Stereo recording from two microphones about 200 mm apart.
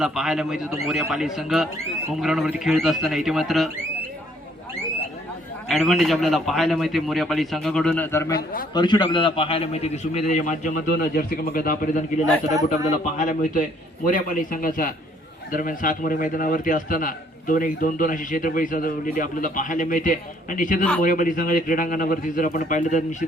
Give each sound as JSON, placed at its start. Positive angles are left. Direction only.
{"t": 0.0, "sound": "a man's voice", "side_deg": 0}
{"t": 5.6, "sound": "a man's voice", "side_deg": 0}